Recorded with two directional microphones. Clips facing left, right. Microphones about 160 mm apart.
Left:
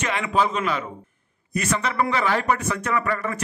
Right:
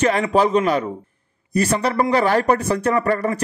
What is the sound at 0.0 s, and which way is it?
A man's voice, 35° right (ahead or behind).